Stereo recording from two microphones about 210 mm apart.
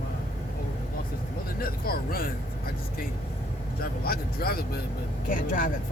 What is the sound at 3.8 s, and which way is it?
Speech, 45° left (ahead or behind).